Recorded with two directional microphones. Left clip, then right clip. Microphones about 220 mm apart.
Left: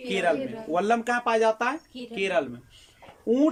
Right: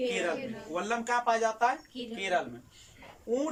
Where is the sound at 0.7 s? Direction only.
50° left (ahead or behind).